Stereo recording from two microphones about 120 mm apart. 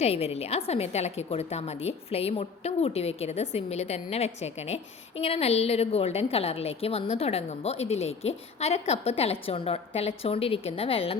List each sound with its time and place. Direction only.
0.0 s a woman's voice: 55° left (ahead or behind)